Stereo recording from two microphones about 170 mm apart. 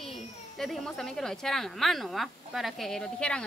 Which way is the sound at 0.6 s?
Centre (ahead or behind).